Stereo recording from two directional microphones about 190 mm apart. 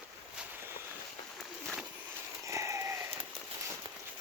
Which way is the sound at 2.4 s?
15° right (ahead or behind).